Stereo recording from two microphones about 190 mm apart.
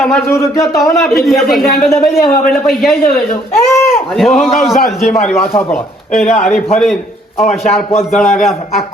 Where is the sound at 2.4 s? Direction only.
Centre (ahead or behind).